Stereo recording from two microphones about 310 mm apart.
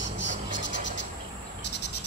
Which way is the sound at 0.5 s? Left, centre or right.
Left.